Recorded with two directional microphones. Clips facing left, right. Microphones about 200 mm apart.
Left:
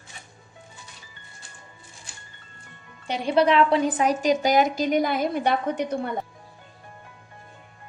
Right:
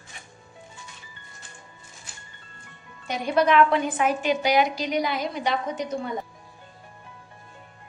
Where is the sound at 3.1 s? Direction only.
30° left (ahead or behind); by 6.1 s 60° left (ahead or behind).